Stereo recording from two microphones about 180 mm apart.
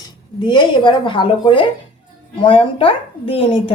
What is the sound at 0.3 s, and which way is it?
A woman's voice, 25° left (ahead or behind).